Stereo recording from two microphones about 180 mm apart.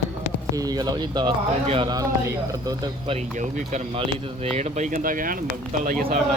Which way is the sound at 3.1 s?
45° right (ahead or behind).